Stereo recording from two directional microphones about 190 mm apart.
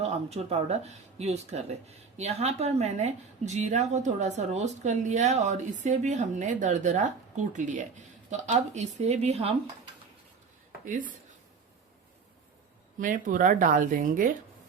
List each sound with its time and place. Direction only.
0.0 s a woman's voice: 35° right (ahead or behind)
10.8 s speech: 40° right (ahead or behind)
13.0 s speech: 45° right (ahead or behind)